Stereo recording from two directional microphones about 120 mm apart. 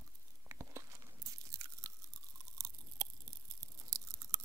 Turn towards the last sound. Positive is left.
turn(degrees=-25)  # may be behind; listen again after turning